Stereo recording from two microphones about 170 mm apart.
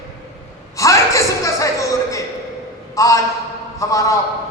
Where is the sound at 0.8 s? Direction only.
20° left (ahead or behind).